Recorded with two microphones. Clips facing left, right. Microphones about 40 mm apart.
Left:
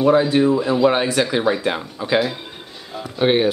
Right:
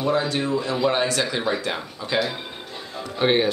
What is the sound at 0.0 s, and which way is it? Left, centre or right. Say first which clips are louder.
Speech: left 8 dB; centre.